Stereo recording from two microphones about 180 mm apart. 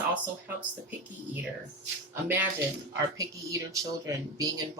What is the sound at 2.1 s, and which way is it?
Speech, 10° right (ahead or behind).